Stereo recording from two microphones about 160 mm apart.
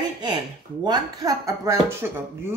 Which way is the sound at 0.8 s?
25° right (ahead or behind).